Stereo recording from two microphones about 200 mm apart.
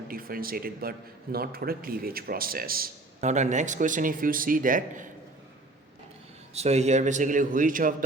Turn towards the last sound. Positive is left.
turn(degrees=-40)  # may be behind; listen again after turning